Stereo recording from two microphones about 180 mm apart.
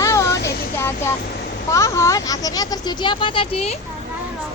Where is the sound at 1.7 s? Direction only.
15° left (ahead or behind); by 3.8 s 35° left (ahead or behind).